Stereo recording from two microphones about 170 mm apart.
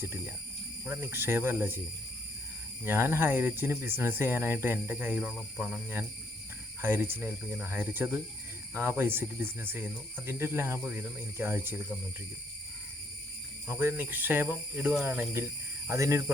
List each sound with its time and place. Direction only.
0.9 s speech: 15° right (ahead or behind)
2.8 s speech: 15° right (ahead or behind)
13.7 s speech: 15° right (ahead or behind)